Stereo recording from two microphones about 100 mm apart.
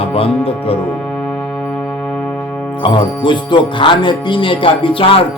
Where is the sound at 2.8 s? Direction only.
55° left (ahead or behind).